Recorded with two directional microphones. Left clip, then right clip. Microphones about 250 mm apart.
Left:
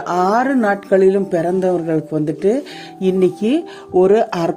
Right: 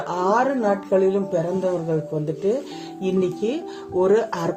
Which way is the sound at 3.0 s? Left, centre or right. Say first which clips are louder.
Left 7 dB; left.